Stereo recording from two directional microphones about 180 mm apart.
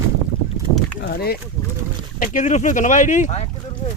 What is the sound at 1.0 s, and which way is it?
Speech, 60° left (ahead or behind).